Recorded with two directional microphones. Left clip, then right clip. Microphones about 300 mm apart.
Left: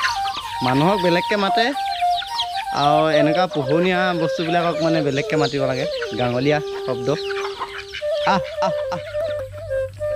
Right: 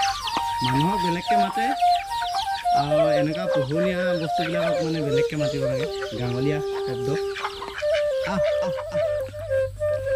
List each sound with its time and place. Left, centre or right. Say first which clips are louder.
1.1 s a man's voice: left 4 dB; centre
2.7 s a man's voice: left 3 dB; centre
4.6 s a man's voice: left 5 dB; centre
8.3 s a man's voice: left 3 dB; centre